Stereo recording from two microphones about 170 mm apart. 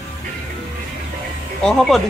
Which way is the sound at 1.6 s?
5° left (ahead or behind).